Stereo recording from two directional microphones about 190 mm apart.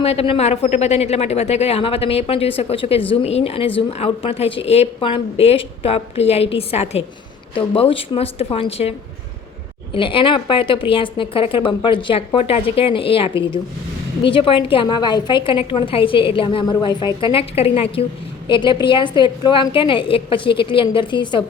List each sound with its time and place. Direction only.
0.0 s a woman's voice: 30° left (ahead or behind)